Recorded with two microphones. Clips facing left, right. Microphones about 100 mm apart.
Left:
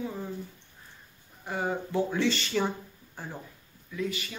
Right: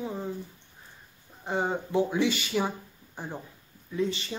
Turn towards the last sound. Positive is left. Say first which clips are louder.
# right 4 dB
turn(degrees=-30)  # may be behind; listen again after turning